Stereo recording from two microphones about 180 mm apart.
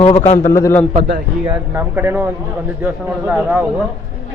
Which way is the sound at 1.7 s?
10° right (ahead or behind).